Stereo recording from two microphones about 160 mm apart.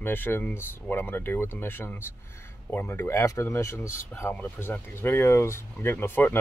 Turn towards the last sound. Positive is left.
turn(degrees=15)  # may be behind; listen again after turning